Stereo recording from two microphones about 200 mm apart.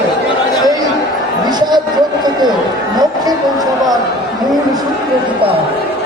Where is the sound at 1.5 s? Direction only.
20° right (ahead or behind).